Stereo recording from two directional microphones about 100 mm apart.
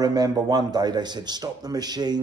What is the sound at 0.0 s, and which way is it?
Speech, 40° right (ahead or behind).